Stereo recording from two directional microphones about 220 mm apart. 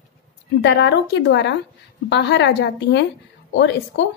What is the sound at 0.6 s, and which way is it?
A woman's voice, 50° left (ahead or behind).